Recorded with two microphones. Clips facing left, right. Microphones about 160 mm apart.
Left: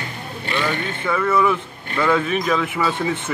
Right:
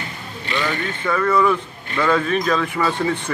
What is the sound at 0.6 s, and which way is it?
Speech, 10° left (ahead or behind).